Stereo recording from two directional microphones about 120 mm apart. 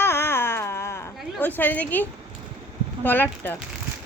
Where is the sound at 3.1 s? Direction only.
15° left (ahead or behind).